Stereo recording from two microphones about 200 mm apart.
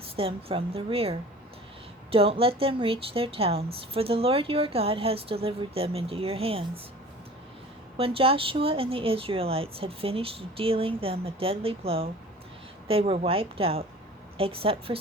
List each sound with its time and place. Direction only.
0.2 s a woman's voice: 30° right (ahead or behind)
2.1 s a woman's voice: 25° right (ahead or behind)
7.9 s a woman's voice: 25° right (ahead or behind)